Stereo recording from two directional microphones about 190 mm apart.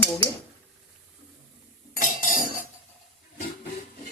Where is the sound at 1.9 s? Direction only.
45° left (ahead or behind).